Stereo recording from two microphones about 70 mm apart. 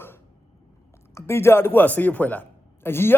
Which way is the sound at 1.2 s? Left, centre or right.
Left.